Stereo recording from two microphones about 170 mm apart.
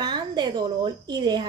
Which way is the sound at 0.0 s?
25° right (ahead or behind).